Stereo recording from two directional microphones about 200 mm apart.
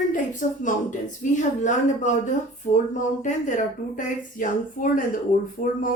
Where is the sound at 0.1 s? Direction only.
40° left (ahead or behind).